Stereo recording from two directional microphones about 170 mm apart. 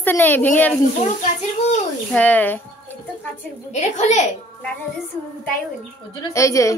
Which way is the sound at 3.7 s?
45° left (ahead or behind).